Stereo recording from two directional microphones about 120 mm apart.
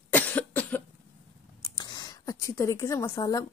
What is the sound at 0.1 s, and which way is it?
Cough, 15° left (ahead or behind).